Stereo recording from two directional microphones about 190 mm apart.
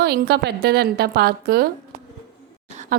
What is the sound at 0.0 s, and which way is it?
A woman's voice, 55° right (ahead or behind).